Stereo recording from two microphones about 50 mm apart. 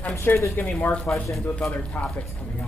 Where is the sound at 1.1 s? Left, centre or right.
Left.